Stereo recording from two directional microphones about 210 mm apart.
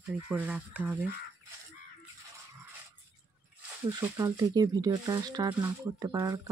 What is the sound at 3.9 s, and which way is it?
Speech, 15° right (ahead or behind).